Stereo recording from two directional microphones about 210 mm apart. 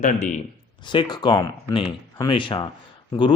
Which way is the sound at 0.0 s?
35° left (ahead or behind).